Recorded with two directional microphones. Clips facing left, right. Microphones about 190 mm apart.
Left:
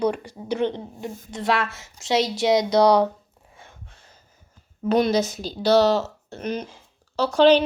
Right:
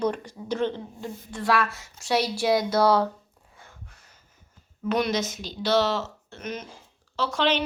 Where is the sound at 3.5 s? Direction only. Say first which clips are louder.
Left 2 dB; 25° left (ahead or behind).